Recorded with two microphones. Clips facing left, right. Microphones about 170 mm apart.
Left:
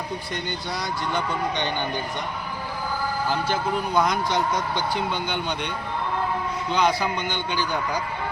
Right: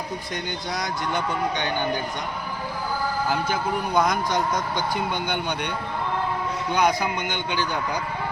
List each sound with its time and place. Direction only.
0.8 s speech: 15° right (ahead or behind)
3.9 s speech: centre (ahead or behind)
6.7 s speech: 15° right (ahead or behind)